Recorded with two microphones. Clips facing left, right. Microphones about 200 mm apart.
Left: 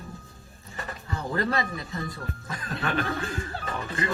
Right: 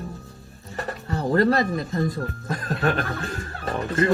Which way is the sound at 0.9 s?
40° right (ahead or behind).